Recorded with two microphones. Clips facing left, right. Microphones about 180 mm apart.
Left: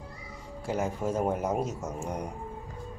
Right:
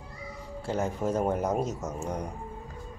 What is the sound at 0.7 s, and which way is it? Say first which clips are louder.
Speech: right 1 dB; 10° left (ahead or behind).